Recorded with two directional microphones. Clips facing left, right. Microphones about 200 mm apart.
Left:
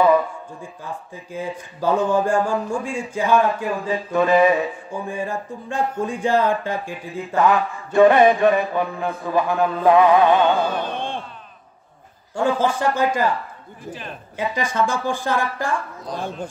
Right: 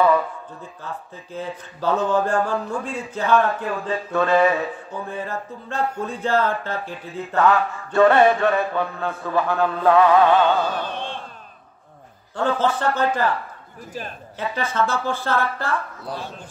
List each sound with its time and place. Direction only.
0.6 s speech: 10° left (ahead or behind)
10.9 s a sound: 55° left (ahead or behind)
12.4 s speech: 10° left (ahead or behind)
14.3 s speech: 10° left (ahead or behind)